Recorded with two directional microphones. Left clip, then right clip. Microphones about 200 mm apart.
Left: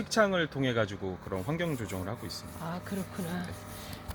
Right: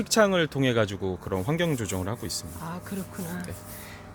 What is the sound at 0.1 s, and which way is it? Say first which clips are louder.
Speech: right 5 dB; 60° right (ahead or behind).